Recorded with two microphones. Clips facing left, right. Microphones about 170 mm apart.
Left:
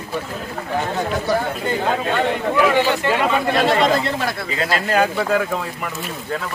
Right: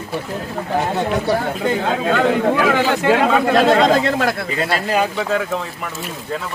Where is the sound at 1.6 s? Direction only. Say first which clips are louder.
Right 2 dB; 90° right.